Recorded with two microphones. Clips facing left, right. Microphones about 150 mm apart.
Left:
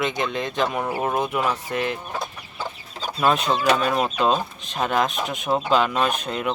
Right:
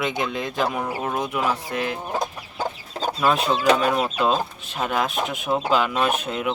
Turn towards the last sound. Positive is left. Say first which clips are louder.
# right 1 dB
turn(degrees=-5)  # may be behind; listen again after turning